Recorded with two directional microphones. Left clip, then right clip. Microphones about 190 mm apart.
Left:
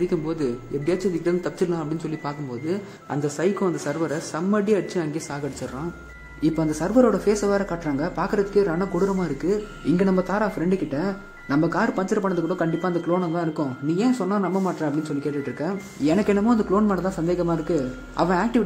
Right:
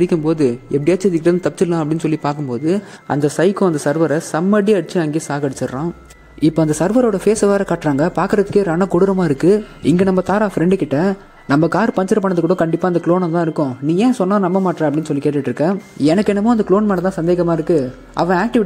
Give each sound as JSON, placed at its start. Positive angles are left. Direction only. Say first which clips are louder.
{"t": 0.0, "sound": "speech", "louder": "right 9 dB", "side_deg": -35}